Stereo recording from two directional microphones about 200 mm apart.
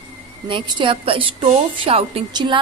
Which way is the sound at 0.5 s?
25° right (ahead or behind).